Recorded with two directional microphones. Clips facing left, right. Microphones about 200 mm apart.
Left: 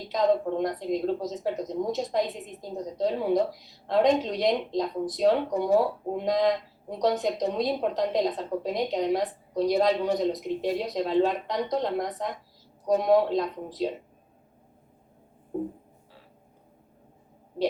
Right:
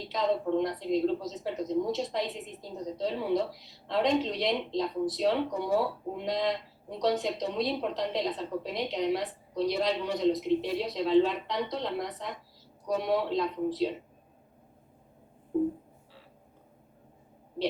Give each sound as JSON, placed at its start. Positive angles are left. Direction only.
{"t": 0.0, "sound": "a woman's voice", "side_deg": 45}